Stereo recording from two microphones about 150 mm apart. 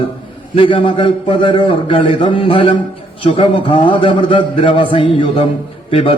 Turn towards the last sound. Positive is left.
turn(degrees=40)  # may be behind; listen again after turning